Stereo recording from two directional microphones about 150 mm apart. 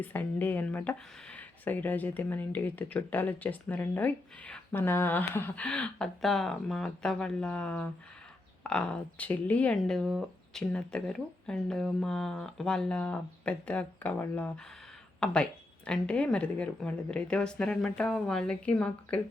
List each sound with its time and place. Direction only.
0.0 s speech: 10° left (ahead or behind)